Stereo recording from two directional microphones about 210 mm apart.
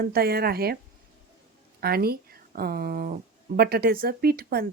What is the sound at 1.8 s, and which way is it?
A woman's voice, 45° right (ahead or behind).